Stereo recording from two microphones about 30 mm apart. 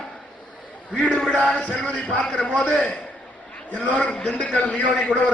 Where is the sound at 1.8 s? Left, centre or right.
Left.